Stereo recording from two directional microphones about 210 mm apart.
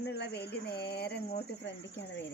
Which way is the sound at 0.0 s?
50° left (ahead or behind).